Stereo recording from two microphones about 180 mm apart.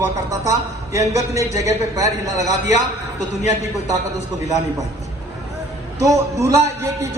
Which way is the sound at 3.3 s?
40° left (ahead or behind).